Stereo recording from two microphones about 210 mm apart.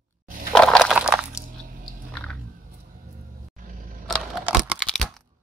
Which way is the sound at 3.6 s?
40° right (ahead or behind).